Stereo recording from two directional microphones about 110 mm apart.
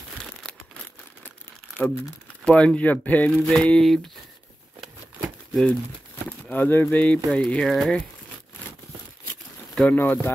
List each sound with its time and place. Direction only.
0.2 s crumpling: 5° left (ahead or behind)
2.4 s speech: 10° left (ahead or behind)
5.5 s speech: 5° left (ahead or behind)
9.8 s speech: 15° left (ahead or behind)